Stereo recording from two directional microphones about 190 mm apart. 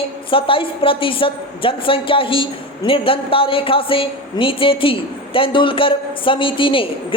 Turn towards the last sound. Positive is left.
turn(degrees=25)  # may be behind; listen again after turning